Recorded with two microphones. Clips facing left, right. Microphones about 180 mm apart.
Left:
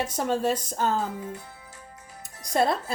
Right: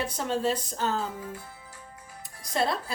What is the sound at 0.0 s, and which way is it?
Speech, 45° left (ahead or behind).